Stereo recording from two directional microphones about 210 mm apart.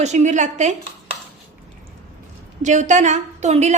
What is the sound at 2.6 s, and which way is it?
A woman's voice, 35° right (ahead or behind).